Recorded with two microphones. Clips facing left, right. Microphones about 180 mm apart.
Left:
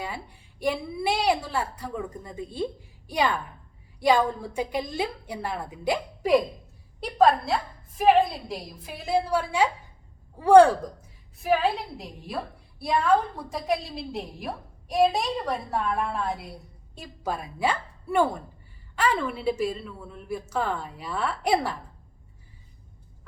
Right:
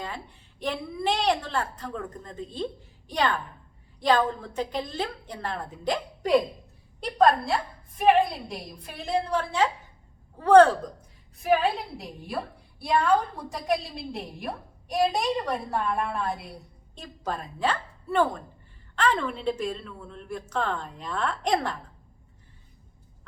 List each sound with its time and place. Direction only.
0.0 s a woman's voice: 10° left (ahead or behind)